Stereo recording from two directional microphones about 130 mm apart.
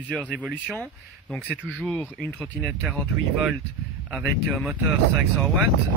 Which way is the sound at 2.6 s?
Centre (ahead or behind).